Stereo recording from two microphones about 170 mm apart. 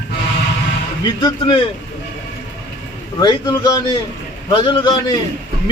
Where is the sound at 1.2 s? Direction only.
25° left (ahead or behind).